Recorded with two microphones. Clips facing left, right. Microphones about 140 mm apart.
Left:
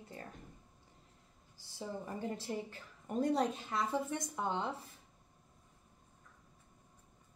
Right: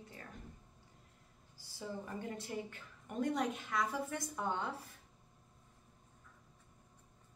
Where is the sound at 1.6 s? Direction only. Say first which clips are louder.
Left 2 dB; 25° left (ahead or behind).